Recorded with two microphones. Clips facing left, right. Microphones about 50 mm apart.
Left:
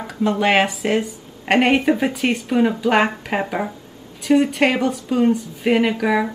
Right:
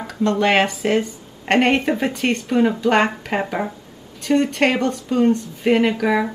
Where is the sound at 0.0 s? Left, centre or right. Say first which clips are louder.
Even; centre.